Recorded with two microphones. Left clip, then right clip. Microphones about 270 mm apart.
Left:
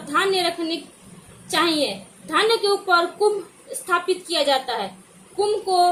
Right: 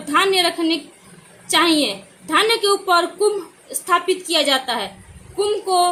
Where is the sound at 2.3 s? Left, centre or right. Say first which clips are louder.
Right 3 dB; right.